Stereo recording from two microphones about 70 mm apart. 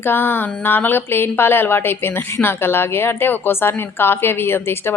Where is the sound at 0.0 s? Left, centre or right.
Left.